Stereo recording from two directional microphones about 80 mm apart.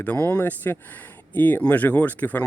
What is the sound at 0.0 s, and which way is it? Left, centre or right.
Speech, left.